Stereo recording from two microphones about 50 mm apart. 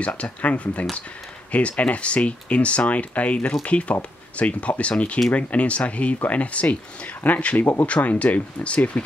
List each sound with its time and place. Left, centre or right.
0.0 s speech: left